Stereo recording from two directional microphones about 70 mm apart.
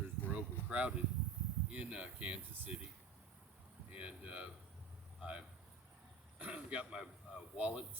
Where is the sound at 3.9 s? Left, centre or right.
Centre.